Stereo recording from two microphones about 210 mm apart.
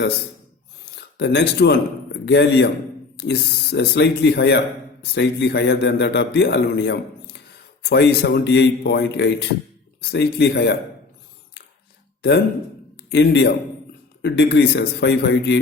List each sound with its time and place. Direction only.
0.9 s a man's voice: 55° left (ahead or behind)
13.1 s a man's voice: 55° left (ahead or behind)